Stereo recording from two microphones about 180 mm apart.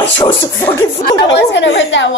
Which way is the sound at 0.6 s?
10° left (ahead or behind).